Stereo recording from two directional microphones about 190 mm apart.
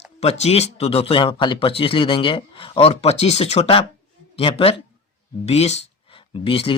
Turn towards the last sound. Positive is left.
turn(degrees=30)  # may be behind; listen again after turning